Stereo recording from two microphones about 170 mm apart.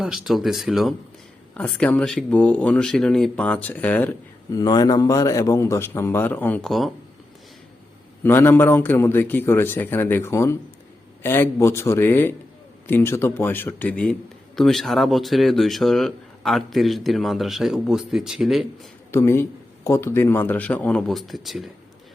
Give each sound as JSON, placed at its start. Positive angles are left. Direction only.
{"t": 0.0, "sound": "a man's voice", "side_deg": 0}
{"t": 4.5, "sound": "a man's voice", "side_deg": 25}
{"t": 8.2, "sound": "a man's voice", "side_deg": 15}
{"t": 19.1, "sound": "a man's voice", "side_deg": 15}